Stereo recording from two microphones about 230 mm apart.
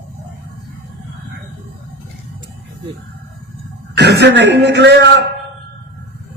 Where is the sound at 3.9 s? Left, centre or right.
Right.